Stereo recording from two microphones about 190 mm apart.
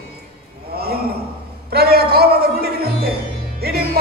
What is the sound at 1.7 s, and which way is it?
Music, 55° right (ahead or behind).